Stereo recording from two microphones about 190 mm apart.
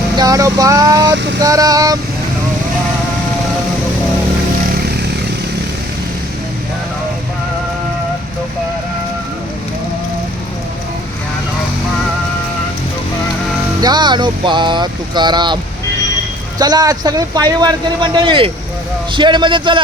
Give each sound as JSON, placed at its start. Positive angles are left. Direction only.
{"t": 0.2, "sound": "speech", "side_deg": -20}
{"t": 1.1, "sound": "child singing", "side_deg": -65}
{"t": 1.4, "sound": "speech", "side_deg": -20}
{"t": 13.8, "sound": "speech", "side_deg": -20}
{"t": 16.6, "sound": "speech", "side_deg": -20}